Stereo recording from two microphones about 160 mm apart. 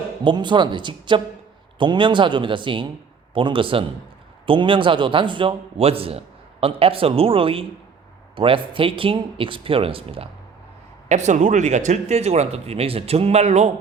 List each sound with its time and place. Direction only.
0.3 s a woman's voice: 30° right (ahead or behind)
11.1 s speech: 45° right (ahead or behind)